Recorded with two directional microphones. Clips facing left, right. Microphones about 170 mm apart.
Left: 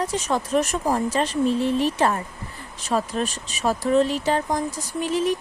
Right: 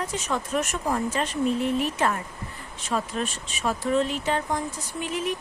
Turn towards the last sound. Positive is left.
turn(degrees=35)  # may be behind; listen again after turning